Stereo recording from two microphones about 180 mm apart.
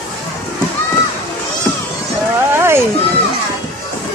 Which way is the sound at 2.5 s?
15° right (ahead or behind).